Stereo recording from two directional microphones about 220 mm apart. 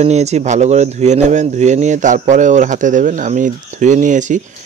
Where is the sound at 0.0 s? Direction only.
30° right (ahead or behind).